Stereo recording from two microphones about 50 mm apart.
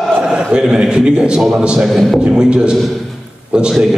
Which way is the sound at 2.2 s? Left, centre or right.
Centre.